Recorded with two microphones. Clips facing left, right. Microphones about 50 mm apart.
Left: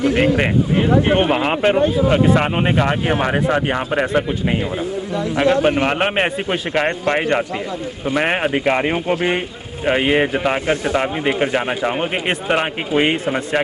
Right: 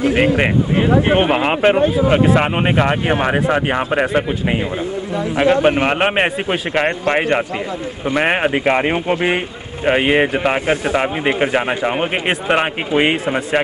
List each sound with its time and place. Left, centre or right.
0.4 s speech: right
5.4 s speech: centre